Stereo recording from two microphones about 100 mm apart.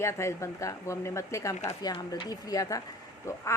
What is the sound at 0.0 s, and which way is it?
A woman's voice, 30° left (ahead or behind).